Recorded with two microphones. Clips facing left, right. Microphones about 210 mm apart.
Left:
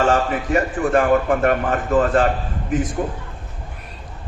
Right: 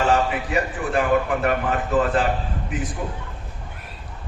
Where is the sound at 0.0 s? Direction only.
45° left (ahead or behind).